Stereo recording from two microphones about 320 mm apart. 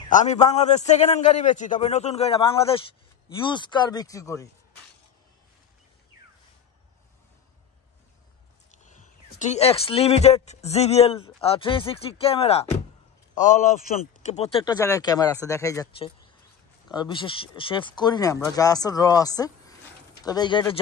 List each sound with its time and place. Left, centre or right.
0.1 s a man's voice: left
8.7 s a man's voice: left